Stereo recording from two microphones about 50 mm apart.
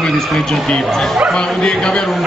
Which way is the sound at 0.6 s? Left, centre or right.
Centre.